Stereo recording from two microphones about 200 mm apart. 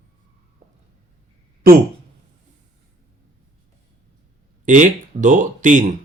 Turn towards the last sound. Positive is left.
turn(degrees=-40)  # may be behind; listen again after turning